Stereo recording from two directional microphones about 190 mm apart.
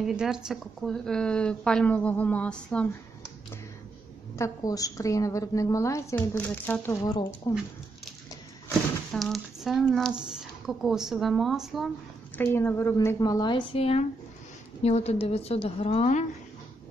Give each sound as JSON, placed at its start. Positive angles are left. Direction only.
{"t": 0.0, "sound": "speech", "side_deg": -5}
{"t": 4.4, "sound": "a woman's voice", "side_deg": 20}
{"t": 9.1, "sound": "speech", "side_deg": 0}
{"t": 12.4, "sound": "a woman's voice", "side_deg": 10}